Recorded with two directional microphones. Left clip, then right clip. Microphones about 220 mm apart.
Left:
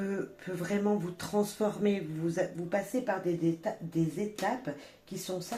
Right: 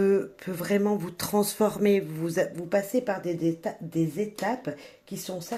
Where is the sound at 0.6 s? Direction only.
45° right (ahead or behind).